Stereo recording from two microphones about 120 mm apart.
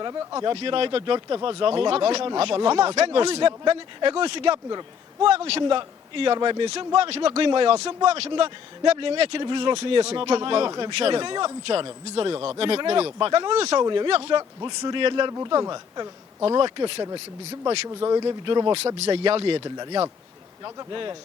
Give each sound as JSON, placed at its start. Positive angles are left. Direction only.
{"t": 0.0, "sound": "speech", "side_deg": -30}
{"t": 0.4, "sound": "speech", "side_deg": -45}
{"t": 13.8, "sound": "speech", "side_deg": -40}
{"t": 15.3, "sound": "speech", "side_deg": -30}
{"t": 17.8, "sound": "speech", "side_deg": -35}
{"t": 18.9, "sound": "speech", "side_deg": -50}
{"t": 19.6, "sound": "speech", "side_deg": -35}